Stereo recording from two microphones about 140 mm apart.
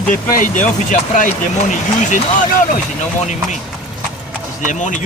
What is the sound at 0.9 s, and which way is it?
Speech, 65° left (ahead or behind).